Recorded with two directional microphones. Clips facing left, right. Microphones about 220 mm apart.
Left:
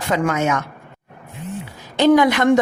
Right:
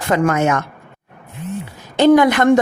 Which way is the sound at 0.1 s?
55° right (ahead or behind).